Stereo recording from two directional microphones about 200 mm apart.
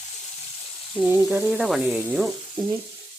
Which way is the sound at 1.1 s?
10° right (ahead or behind).